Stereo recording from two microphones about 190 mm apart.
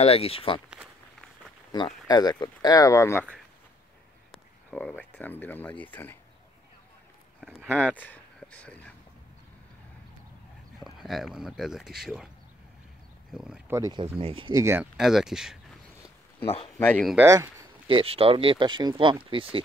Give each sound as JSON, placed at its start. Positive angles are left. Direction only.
{"t": 0.0, "sound": "speech", "side_deg": 30}
{"t": 2.0, "sound": "speech", "side_deg": 20}
{"t": 4.6, "sound": "speech", "side_deg": 5}
{"t": 7.3, "sound": "speech", "side_deg": 5}
{"t": 10.8, "sound": "speech", "side_deg": 0}
{"t": 13.3, "sound": "speech", "side_deg": 0}
{"t": 13.7, "sound": "speech", "side_deg": -20}
{"t": 14.6, "sound": "speech", "side_deg": -15}
{"t": 15.0, "sound": "speech", "side_deg": 0}
{"t": 16.4, "sound": "speech", "side_deg": 30}
{"t": 16.7, "sound": "speech", "side_deg": 10}
{"t": 17.1, "sound": "speech", "side_deg": -15}
{"t": 17.8, "sound": "speech", "side_deg": -30}